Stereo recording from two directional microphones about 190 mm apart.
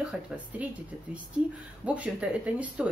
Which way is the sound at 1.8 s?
5° right (ahead or behind).